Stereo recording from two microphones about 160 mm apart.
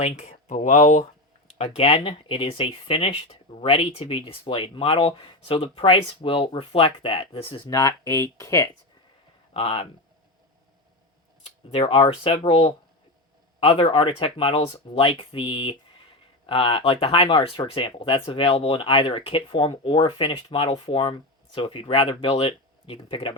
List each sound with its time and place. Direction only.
0.0 s speech: 45° left (ahead or behind); by 8.7 s 20° left (ahead or behind)
9.5 s speech: 35° left (ahead or behind)
11.7 s speech: 35° left (ahead or behind)